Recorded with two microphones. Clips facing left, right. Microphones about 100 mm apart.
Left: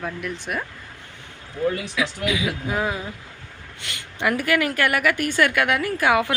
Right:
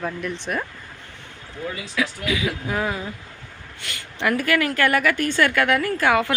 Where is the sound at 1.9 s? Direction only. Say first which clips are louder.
Even; 20° left (ahead or behind).